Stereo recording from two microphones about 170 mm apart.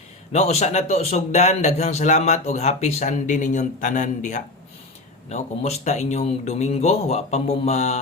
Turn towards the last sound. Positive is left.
turn(degrees=40)  # may be behind; listen again after turning